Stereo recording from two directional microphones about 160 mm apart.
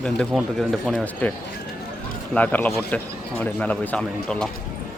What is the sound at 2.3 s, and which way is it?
Speech, 10° left (ahead or behind).